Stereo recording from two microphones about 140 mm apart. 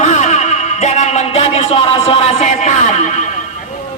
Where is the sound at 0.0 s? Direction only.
55° left (ahead or behind).